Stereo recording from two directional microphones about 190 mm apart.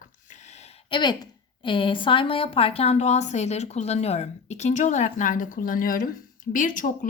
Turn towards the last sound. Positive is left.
turn(degrees=45)  # may be behind; listen again after turning